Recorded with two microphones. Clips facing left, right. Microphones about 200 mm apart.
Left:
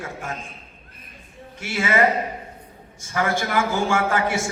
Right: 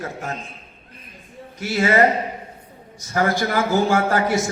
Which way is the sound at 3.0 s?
40° right (ahead or behind).